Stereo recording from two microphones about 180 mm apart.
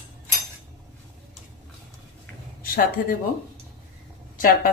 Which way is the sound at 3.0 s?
50° left (ahead or behind).